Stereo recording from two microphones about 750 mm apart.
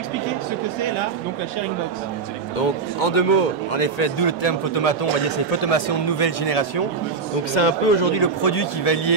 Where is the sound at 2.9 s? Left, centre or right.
Left.